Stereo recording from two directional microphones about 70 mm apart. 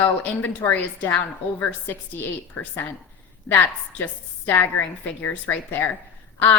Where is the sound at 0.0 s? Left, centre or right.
Left.